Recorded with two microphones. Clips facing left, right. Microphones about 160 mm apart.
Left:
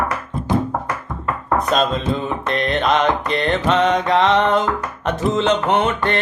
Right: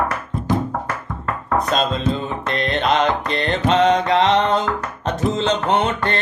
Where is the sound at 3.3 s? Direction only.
35° right (ahead or behind).